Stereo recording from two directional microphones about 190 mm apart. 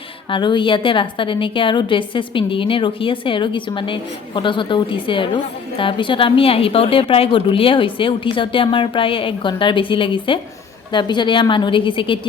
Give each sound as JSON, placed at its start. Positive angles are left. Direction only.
{"t": 0.3, "sound": "a woman's voice", "side_deg": 25}